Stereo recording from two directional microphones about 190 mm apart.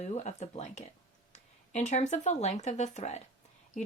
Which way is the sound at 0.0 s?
35° left (ahead or behind).